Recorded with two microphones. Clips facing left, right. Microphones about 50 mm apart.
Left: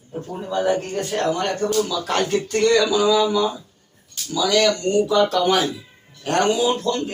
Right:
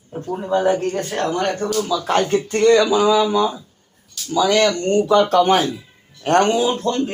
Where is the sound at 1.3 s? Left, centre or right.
Right.